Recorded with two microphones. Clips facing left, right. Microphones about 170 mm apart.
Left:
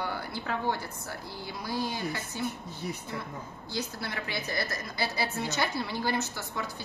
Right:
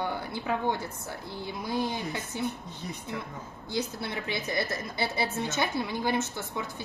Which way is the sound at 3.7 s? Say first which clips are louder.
Right 4 dB; 20° right (ahead or behind).